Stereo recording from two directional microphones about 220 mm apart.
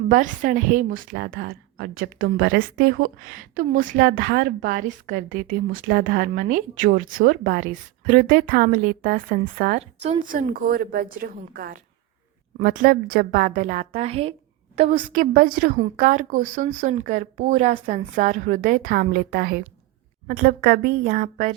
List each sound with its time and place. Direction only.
0.1 s a woman's voice: 35° right (ahead or behind)
1.1 s a woman's voice: 50° right (ahead or behind)